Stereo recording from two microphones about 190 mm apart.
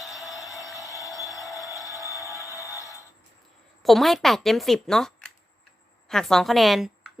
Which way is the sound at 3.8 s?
Centre (ahead or behind).